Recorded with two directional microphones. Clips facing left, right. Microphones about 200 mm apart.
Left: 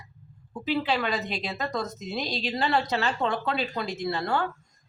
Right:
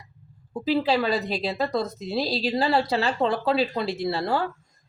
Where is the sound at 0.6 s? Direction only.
35° right (ahead or behind).